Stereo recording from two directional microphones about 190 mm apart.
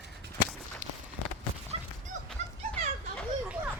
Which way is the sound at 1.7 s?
30° right (ahead or behind).